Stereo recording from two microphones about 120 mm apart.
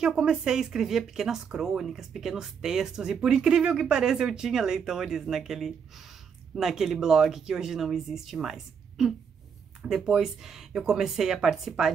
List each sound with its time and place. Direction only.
0.0 s speech: 5° right (ahead or behind)